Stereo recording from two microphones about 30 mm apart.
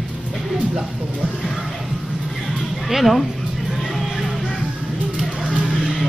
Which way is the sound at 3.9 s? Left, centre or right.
Centre.